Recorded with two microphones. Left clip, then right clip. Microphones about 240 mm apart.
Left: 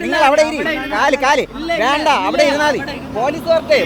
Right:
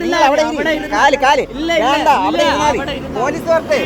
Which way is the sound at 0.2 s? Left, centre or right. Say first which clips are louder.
Left 1 dB; centre.